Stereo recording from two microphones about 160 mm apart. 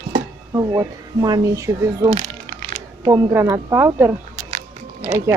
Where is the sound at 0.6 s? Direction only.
25° right (ahead or behind).